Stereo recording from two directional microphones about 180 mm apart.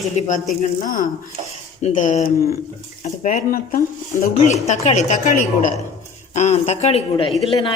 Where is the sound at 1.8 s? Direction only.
45° left (ahead or behind).